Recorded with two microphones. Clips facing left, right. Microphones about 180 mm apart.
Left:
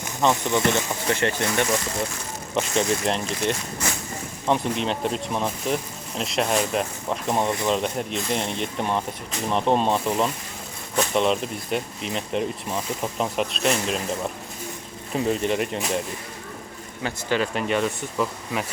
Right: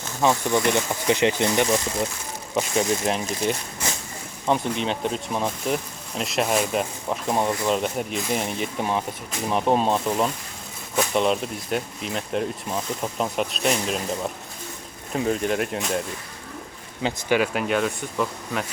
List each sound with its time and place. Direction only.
0.2 s speech: 5° right (ahead or behind)
0.7 s speech: 15° right (ahead or behind)
2.6 s speech: 5° right (ahead or behind)
15.1 s speech: centre (ahead or behind)
17.0 s speech: 15° right (ahead or behind); by 18.6 s centre (ahead or behind)